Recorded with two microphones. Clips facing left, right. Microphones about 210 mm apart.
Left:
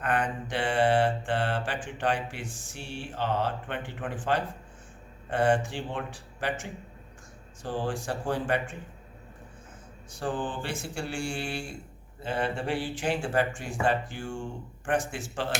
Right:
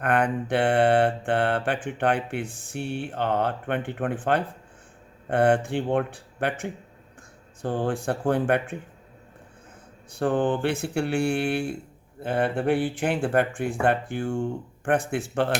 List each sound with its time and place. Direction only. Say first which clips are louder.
0.0 s mantra: right 6 dB; 60° right (ahead or behind)
10.1 s mantra: right 9 dB; 60° right (ahead or behind)